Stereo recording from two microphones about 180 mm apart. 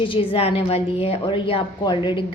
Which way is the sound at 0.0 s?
30° left (ahead or behind).